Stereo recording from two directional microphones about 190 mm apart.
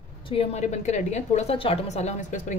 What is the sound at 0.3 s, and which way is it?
A woman's voice, 30° left (ahead or behind).